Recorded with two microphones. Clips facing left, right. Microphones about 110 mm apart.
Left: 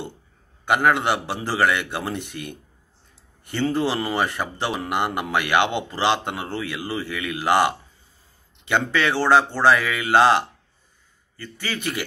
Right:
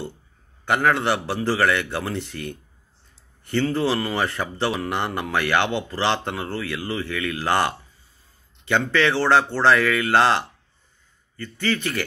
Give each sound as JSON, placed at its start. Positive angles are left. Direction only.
{"t": 0.7, "sound": "speech", "side_deg": 15}